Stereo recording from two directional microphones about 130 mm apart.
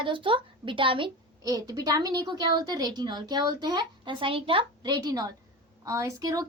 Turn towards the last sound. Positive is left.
turn(degrees=-25)  # may be behind; listen again after turning